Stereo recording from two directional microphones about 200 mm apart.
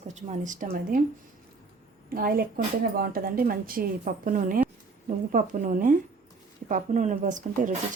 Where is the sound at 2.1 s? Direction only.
45° right (ahead or behind).